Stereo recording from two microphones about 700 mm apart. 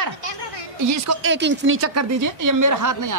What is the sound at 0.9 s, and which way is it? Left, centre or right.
A woman's voice, right.